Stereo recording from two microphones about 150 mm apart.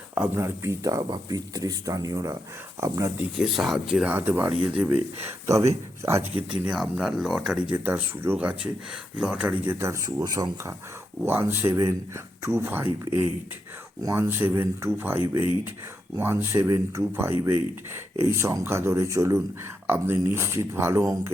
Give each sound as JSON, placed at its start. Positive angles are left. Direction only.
{"t": 0.1, "sound": "speech", "side_deg": -15}
{"t": 3.3, "sound": "speech", "side_deg": 0}
{"t": 6.5, "sound": "speech", "side_deg": -5}
{"t": 14.0, "sound": "speech", "side_deg": -20}